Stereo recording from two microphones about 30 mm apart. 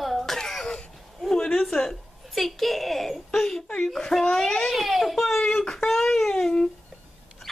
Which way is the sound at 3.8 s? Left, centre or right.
Centre.